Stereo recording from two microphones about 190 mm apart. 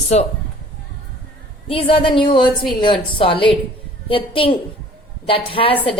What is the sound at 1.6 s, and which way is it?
A woman's voice, 30° left (ahead or behind).